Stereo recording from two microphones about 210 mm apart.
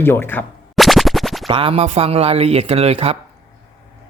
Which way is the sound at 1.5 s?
25° right (ahead or behind).